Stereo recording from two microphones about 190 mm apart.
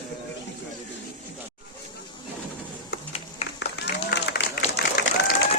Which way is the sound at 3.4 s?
30° left (ahead or behind).